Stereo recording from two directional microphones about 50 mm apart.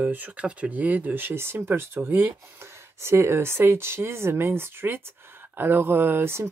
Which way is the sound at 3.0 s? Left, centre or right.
Right.